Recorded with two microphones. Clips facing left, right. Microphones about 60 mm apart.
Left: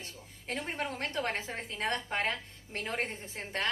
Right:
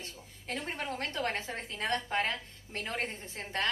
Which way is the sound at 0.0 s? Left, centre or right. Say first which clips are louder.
Even; left.